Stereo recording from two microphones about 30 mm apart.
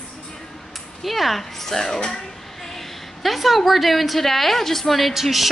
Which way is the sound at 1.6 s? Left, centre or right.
Centre.